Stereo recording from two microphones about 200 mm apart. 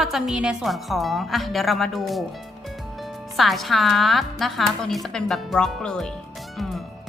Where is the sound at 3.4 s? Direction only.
Centre (ahead or behind).